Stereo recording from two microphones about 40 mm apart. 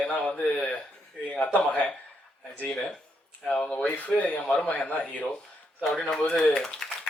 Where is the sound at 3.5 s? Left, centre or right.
Left.